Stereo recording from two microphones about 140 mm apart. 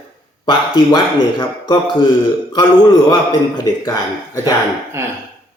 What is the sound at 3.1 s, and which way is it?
Speech, 30° left (ahead or behind).